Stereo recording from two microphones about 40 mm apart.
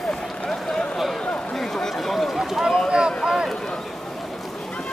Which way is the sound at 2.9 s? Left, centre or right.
Right.